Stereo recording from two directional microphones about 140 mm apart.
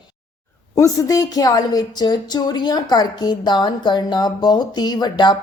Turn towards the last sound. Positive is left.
turn(degrees=35)  # may be behind; listen again after turning